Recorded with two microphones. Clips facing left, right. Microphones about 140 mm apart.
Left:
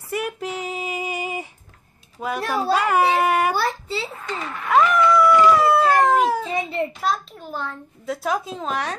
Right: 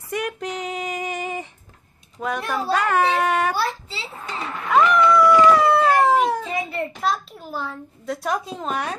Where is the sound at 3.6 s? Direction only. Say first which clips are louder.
Left 2 dB; 50° left (ahead or behind).